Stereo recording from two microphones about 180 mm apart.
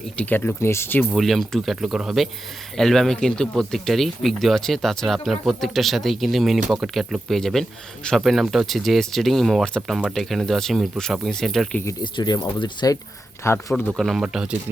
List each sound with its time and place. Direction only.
0.2 s speech: 10° left (ahead or behind)
11.9 s speech: 25° left (ahead or behind)
13.7 s speech: centre (ahead or behind)